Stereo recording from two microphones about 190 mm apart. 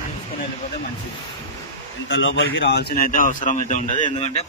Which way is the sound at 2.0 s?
75° left (ahead or behind).